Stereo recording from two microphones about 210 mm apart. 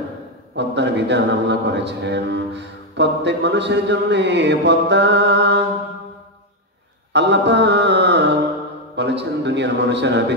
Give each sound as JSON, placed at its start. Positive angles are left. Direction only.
{"t": 0.6, "sound": "speech", "side_deg": -55}
{"t": 7.1, "sound": "mantra", "side_deg": -55}
{"t": 8.9, "sound": "speech", "side_deg": -55}